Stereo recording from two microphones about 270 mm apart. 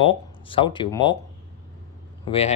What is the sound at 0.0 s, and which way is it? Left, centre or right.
Speech, centre.